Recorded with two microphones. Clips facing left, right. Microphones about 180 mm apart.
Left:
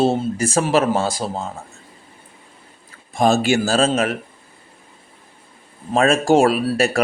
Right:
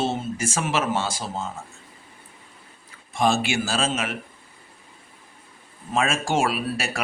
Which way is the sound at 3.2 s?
40° left (ahead or behind).